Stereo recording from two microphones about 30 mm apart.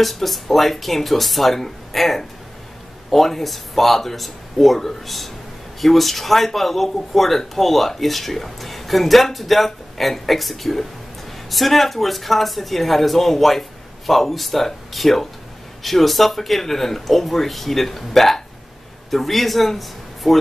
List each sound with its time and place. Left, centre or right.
0.0 s a man's voice: centre